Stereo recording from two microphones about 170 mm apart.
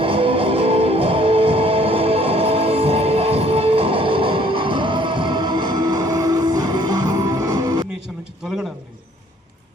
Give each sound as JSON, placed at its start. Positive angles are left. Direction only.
{"t": 0.0, "sound": "music", "side_deg": -30}